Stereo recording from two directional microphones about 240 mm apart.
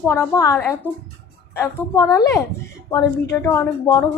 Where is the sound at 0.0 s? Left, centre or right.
Centre.